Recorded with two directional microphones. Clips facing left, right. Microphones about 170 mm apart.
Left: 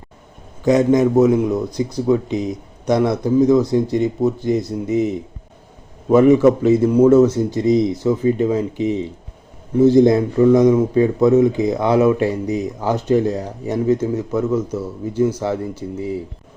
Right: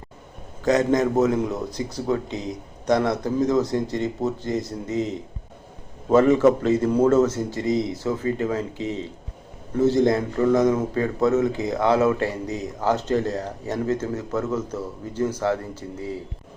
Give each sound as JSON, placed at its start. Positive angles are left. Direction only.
{"t": 0.6, "sound": "speech", "side_deg": 10}